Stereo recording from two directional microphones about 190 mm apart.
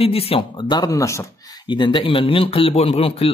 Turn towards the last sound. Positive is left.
turn(degrees=30)  # may be behind; listen again after turning